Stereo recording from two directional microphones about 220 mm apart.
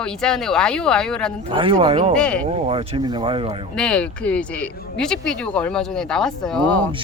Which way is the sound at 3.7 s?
5° left (ahead or behind).